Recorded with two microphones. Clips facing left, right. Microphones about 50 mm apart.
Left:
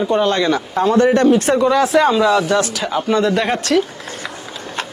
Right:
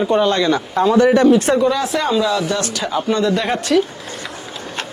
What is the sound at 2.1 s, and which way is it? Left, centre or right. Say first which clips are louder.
Speech: left 3 dB; left.